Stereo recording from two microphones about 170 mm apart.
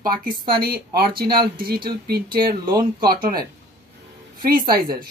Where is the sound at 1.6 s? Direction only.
60° right (ahead or behind).